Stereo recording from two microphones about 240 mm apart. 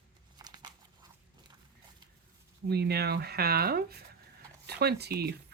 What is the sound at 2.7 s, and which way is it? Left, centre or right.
Speech, right.